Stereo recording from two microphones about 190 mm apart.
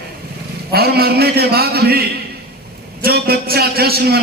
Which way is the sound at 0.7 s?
55° right (ahead or behind).